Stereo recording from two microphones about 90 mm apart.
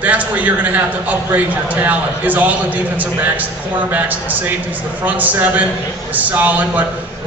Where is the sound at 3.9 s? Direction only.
20° right (ahead or behind).